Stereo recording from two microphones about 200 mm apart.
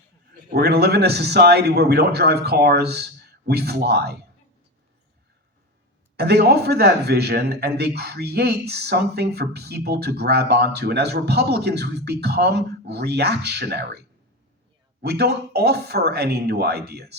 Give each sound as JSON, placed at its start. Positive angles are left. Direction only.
{"t": 0.5, "sound": "a man's voice", "side_deg": -50}
{"t": 6.1, "sound": "a man's voice", "side_deg": -55}
{"t": 15.0, "sound": "a man's voice", "side_deg": -55}